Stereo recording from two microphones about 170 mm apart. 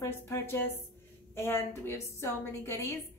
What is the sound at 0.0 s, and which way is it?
A woman's voice, 15° left (ahead or behind).